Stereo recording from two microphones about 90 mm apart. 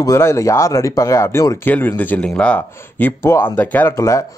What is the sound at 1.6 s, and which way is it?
Speech, 20° left (ahead or behind).